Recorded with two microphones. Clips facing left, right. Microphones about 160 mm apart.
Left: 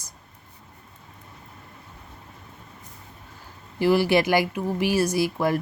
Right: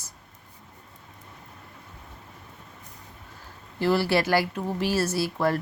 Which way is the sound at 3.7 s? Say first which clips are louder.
Left 3 dB; 15° left (ahead or behind).